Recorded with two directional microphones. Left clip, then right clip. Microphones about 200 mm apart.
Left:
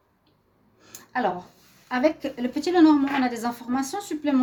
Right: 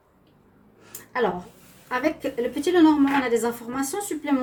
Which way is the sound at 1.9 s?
45° left (ahead or behind).